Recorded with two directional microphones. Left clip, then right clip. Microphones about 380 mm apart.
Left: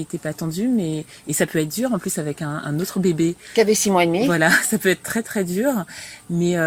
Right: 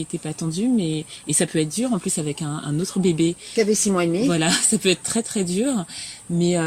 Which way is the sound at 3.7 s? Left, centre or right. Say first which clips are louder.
Left 3 dB; left.